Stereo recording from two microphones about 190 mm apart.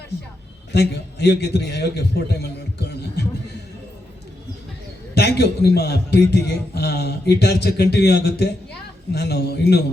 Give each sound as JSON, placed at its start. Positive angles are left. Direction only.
{"t": 0.7, "sound": "a man's voice", "side_deg": 60}
{"t": 5.1, "sound": "a man's voice", "side_deg": 60}